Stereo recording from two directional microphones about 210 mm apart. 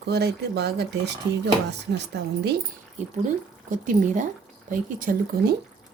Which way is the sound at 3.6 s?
35° right (ahead or behind).